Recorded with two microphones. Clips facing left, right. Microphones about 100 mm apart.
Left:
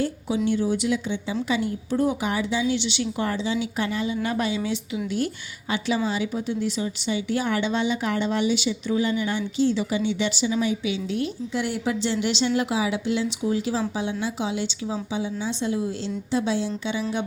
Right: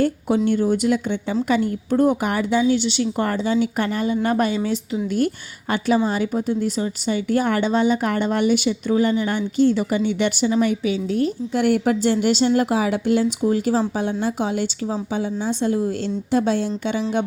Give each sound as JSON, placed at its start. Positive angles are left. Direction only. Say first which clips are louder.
{"t": 0.0, "sound": "speech", "louder": "right 5 dB", "side_deg": -55}